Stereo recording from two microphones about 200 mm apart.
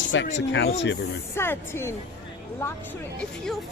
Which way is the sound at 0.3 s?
60° left (ahead or behind).